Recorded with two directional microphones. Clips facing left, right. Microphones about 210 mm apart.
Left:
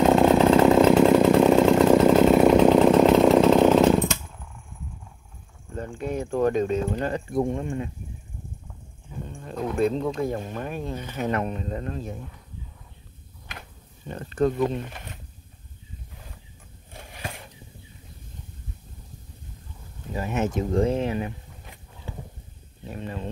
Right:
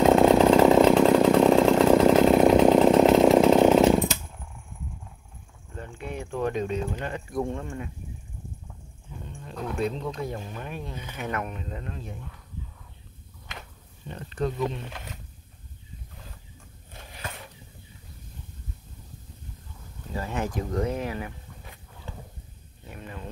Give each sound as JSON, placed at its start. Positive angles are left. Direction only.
{"t": 0.0, "sound": "chainsaw", "side_deg": 0}
{"t": 5.8, "sound": "speech", "side_deg": 40}
{"t": 7.3, "sound": "speech", "side_deg": 15}
{"t": 9.4, "sound": "speech", "side_deg": 50}
{"t": 11.2, "sound": "speech", "side_deg": 30}
{"t": 14.1, "sound": "speech", "side_deg": 50}
{"t": 20.1, "sound": "speech", "side_deg": 20}
{"t": 22.8, "sound": "speech", "side_deg": 30}